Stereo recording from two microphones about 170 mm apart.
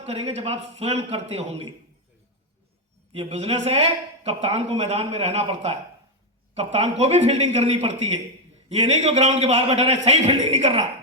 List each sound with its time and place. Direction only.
0.0 s speech: 35° right (ahead or behind)
3.1 s speech: 35° right (ahead or behind)